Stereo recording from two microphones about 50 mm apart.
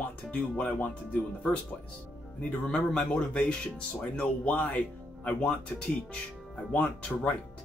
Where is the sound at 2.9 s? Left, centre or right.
Centre.